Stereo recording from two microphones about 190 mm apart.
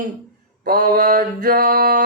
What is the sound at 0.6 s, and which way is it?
Mantra, 50° right (ahead or behind).